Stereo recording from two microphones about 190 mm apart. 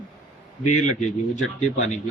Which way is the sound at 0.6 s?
40° left (ahead or behind).